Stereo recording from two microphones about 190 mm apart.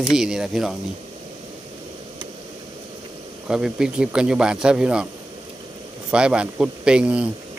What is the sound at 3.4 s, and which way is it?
Speech, 5° right (ahead or behind).